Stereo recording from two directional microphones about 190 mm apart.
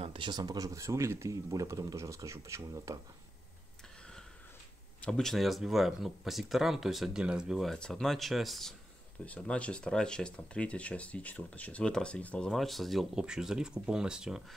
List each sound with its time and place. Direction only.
0.0 s speech: 25° right (ahead or behind)
5.0 s speech: 5° left (ahead or behind)